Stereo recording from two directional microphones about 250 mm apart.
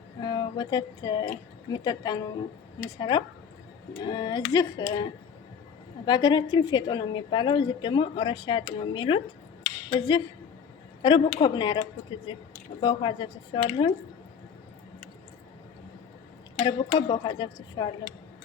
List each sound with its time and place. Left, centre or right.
0.2 s a sound: centre
1.7 s a woman's voice: centre
6.1 s a woman's voice: centre
9.6 s a sound: centre
11.0 s a woman's voice: centre
16.6 s a woman's voice: left